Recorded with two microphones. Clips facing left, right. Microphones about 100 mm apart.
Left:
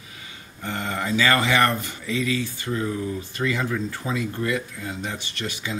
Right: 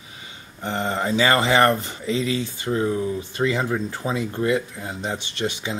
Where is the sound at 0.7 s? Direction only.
25° right (ahead or behind).